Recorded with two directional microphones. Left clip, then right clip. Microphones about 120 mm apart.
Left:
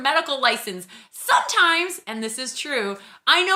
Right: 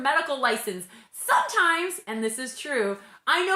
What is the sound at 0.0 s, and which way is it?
A woman's voice, 20° left (ahead or behind).